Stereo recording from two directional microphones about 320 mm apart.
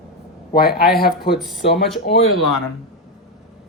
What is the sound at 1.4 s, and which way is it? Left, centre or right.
Speech, centre.